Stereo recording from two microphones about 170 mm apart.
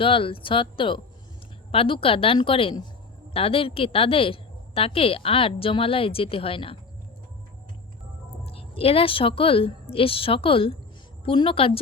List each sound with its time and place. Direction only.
0.0 s a woman's voice: 30° left (ahead or behind)
8.4 s a woman's voice: 35° left (ahead or behind)